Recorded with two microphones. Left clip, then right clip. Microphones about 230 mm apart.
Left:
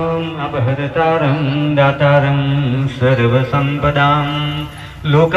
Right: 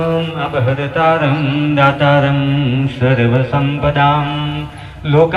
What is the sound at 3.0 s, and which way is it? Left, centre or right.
Speech, right.